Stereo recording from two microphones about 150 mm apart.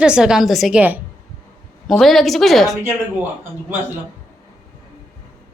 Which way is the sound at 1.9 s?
Centre (ahead or behind).